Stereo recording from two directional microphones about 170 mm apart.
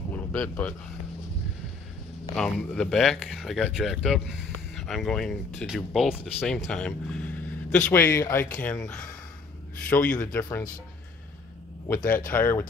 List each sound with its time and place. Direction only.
0.1 s a sound: 10° left (ahead or behind)
2.3 s speech: 5° left (ahead or behind)
11.9 s speech: 15° left (ahead or behind)